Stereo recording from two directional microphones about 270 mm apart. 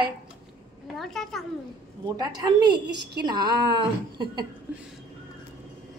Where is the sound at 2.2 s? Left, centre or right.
Centre.